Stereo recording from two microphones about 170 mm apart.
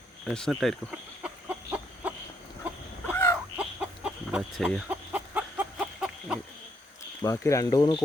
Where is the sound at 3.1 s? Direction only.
10° left (ahead or behind).